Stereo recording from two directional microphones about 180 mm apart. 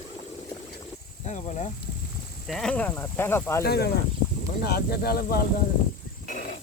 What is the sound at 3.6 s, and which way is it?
Speech, 65° left (ahead or behind).